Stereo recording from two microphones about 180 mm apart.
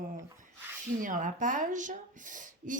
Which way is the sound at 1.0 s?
45° right (ahead or behind).